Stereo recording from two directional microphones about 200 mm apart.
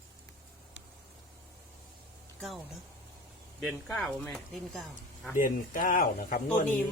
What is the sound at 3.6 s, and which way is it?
Speech, 5° left (ahead or behind).